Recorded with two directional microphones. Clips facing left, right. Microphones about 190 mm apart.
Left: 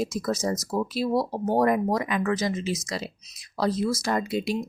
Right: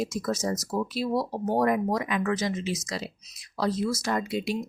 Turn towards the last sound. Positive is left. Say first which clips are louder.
# left 2 dB
turn(degrees=35)  # may be behind; listen again after turning